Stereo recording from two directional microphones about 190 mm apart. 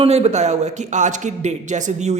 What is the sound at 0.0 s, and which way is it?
Speech, 35° right (ahead or behind).